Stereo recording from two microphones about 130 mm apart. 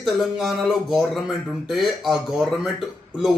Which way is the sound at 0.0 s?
Centre (ahead or behind).